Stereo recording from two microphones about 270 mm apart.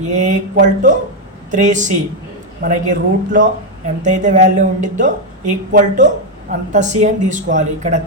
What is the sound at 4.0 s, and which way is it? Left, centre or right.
A woman's voice, right.